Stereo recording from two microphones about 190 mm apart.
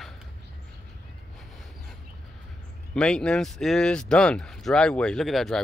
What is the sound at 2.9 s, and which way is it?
Speech, 5° left (ahead or behind).